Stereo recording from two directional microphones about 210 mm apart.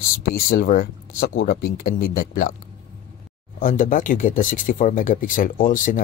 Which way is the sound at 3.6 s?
40° left (ahead or behind).